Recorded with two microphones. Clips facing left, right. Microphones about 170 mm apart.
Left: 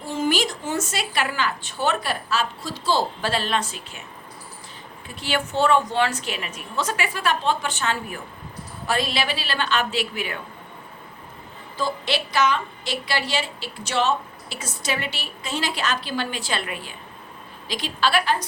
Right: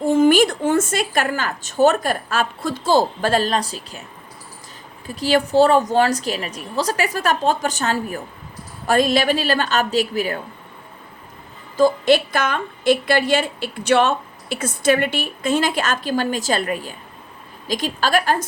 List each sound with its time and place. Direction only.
0.0 s a woman's voice: 50° right (ahead or behind)
5.0 s a woman's voice: 40° right (ahead or behind)
11.8 s a woman's voice: 50° right (ahead or behind)